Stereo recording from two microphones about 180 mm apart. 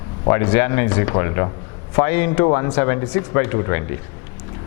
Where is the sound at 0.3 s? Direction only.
15° left (ahead or behind).